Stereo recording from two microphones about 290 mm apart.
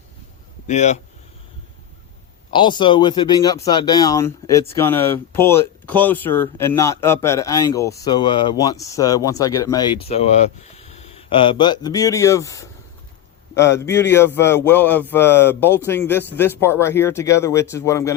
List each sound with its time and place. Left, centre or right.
0.7 s speech: left
2.5 s speech: centre